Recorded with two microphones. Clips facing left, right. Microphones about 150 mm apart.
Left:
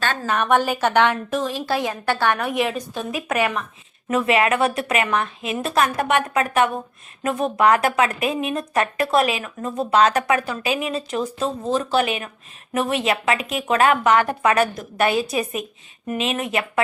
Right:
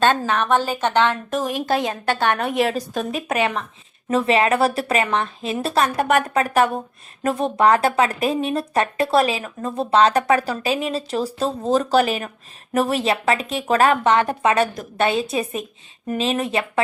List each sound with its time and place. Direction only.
0.3 s a woman's voice: 10° left (ahead or behind)
1.4 s a woman's voice: 15° right (ahead or behind); by 3.1 s 40° right (ahead or behind)
3.1 s a woman's voice: 25° right (ahead or behind)